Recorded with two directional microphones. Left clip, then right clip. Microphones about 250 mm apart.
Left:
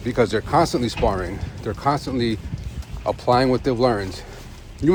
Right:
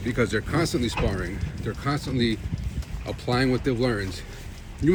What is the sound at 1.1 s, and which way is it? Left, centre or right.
Speech, left.